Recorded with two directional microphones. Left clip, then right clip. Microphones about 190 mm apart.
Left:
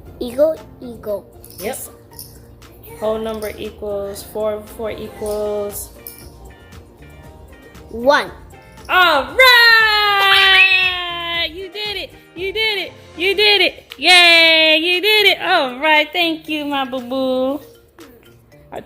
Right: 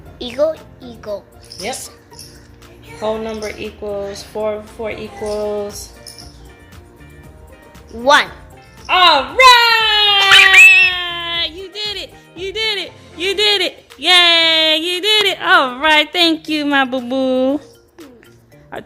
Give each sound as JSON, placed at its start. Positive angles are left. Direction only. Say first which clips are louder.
{"t": 0.2, "sound": "speech", "louder": "left 1 dB", "side_deg": 40}
{"t": 3.8, "sound": "speech", "louder": "even", "side_deg": -20}
{"t": 8.0, "sound": "speech", "louder": "right 3 dB", "side_deg": 35}
{"t": 8.9, "sound": "whimper", "louder": "right 2 dB", "side_deg": -20}
{"t": 10.2, "sound": "cat", "louder": "right 6 dB", "side_deg": -5}
{"t": 15.4, "sound": "a woman's voice", "louder": "right 3 dB", "side_deg": -5}
{"t": 16.6, "sound": "speech", "louder": "right 7 dB", "side_deg": -30}
{"t": 18.7, "sound": "a woman's voice", "louder": "right 1 dB", "side_deg": -10}